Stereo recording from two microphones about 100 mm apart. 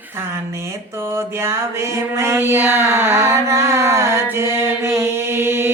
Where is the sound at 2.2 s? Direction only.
25° right (ahead or behind).